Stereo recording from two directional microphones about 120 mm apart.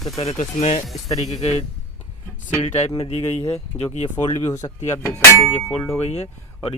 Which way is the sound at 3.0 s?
55° left (ahead or behind).